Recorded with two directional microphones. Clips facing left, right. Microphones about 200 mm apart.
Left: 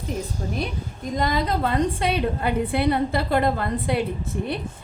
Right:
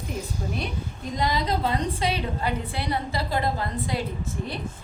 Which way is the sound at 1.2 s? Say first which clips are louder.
Left 2 dB; 55° left (ahead or behind).